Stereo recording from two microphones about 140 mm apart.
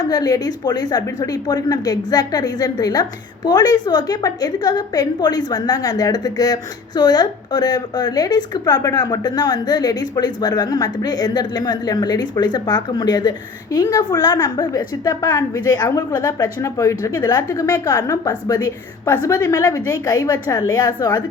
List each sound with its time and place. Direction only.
0.0 s speech: 25° left (ahead or behind)